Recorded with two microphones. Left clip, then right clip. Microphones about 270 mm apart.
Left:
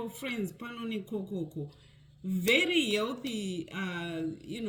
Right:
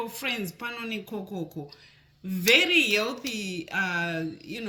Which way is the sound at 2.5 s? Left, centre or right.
Right.